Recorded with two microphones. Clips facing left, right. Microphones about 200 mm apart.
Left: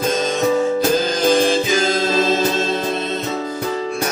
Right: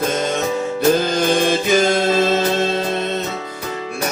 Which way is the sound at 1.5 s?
60° right (ahead or behind).